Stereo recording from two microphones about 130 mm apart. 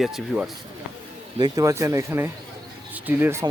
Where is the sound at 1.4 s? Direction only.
25° right (ahead or behind).